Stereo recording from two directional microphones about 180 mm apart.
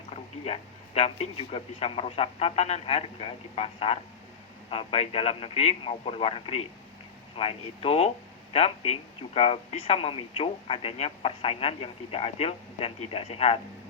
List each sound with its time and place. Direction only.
0.4 s speech: 35° left (ahead or behind)